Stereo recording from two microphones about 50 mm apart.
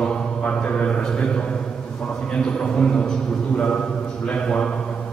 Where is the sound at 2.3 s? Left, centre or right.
Centre.